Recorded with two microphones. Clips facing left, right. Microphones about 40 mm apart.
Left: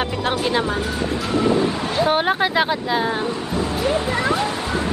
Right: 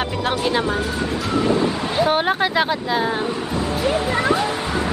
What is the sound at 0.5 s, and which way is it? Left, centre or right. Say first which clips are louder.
Speech: even; centre.